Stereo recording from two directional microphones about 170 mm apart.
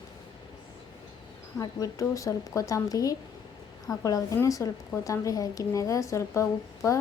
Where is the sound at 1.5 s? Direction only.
20° left (ahead or behind).